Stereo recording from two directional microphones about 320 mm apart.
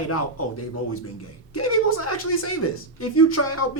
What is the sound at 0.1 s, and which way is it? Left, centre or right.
Speech, left.